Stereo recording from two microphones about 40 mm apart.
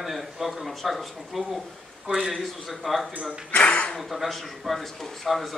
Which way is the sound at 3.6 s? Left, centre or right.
Left.